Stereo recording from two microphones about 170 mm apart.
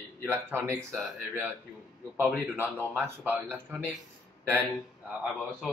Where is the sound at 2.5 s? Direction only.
10° right (ahead or behind).